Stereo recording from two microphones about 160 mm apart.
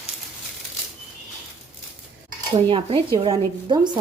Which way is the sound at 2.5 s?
35° right (ahead or behind).